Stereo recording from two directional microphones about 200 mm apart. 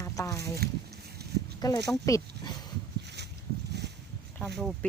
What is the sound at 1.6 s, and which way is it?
Speech, 20° left (ahead or behind).